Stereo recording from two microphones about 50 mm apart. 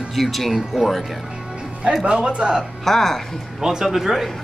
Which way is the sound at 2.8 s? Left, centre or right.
Centre.